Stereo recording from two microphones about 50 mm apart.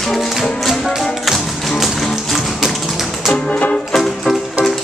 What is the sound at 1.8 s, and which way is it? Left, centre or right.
Music, centre.